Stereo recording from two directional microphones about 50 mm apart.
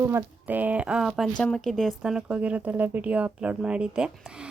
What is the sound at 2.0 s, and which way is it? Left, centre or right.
Speech, centre.